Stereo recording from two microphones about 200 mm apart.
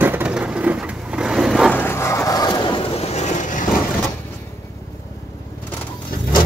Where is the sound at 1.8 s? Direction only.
10° left (ahead or behind); by 3.7 s 40° left (ahead or behind).